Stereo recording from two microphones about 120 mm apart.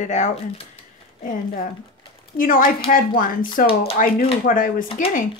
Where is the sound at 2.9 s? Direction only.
90° left.